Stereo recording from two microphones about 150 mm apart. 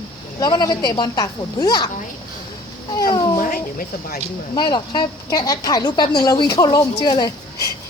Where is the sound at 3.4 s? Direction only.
70° left (ahead or behind).